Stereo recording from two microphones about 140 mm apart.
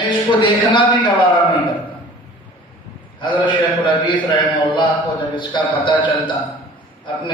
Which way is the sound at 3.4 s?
35° left (ahead or behind).